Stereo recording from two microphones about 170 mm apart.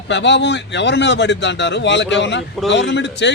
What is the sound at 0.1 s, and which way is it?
Speech, 90° left.